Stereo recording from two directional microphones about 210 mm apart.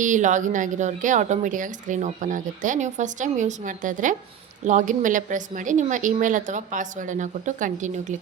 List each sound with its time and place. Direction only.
0.0 s a woman's voice: 35° right (ahead or behind)